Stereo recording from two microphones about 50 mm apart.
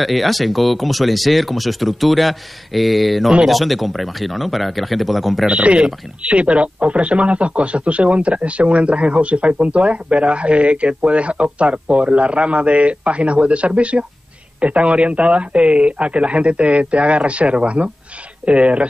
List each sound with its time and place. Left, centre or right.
0.0 s speech: centre
5.5 s speech: right